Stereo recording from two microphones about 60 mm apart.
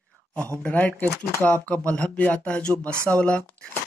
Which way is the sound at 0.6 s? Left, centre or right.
Left.